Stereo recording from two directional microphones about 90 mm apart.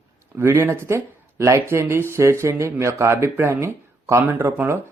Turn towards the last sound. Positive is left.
turn(degrees=-25)  # may be behind; listen again after turning